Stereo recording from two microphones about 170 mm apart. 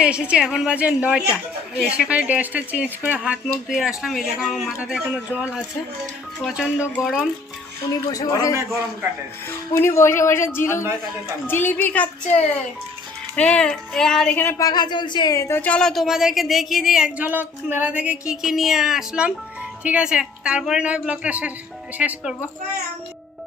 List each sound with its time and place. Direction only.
0.0 s a woman's voice: 5° right (ahead or behind)
8.1 s a man's voice: 20° left (ahead or behind)
14.7 s a woman's voice: 25° left (ahead or behind); by 22.4 s 5° right (ahead or behind)